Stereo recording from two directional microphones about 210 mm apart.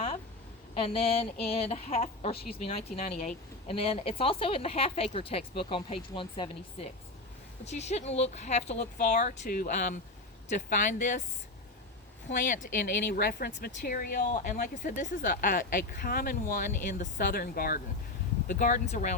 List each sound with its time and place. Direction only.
0.7 s speech: 25° left (ahead or behind)
2.3 s speech: 45° left (ahead or behind)
2.6 s speech: 25° left (ahead or behind)
12.3 s speech: 40° left (ahead or behind)